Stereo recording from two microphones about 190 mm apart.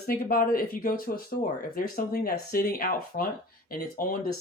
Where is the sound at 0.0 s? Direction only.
50° left (ahead or behind).